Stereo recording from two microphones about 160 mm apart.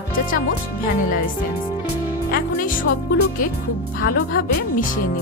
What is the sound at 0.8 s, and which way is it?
Speech, 60° left (ahead or behind).